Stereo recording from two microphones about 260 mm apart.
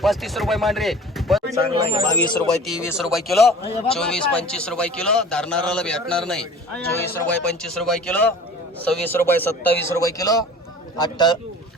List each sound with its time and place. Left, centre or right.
0.0 s speech: centre
1.5 s speech: centre
2.6 s a man's voice: centre